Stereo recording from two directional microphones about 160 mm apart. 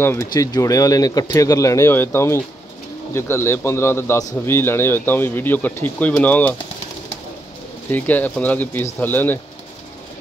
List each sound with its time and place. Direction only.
0.0 s speech: 15° left (ahead or behind)
7.9 s speech: 10° left (ahead or behind)